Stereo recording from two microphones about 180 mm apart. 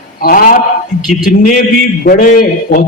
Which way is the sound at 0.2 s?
55° left (ahead or behind).